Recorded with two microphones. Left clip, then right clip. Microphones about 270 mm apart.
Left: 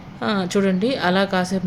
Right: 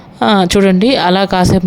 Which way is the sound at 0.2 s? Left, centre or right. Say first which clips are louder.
Right 11 dB; right.